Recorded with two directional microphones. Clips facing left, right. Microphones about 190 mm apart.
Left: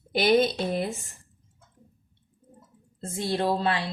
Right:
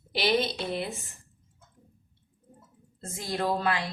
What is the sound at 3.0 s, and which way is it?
Speech, 30° left (ahead or behind).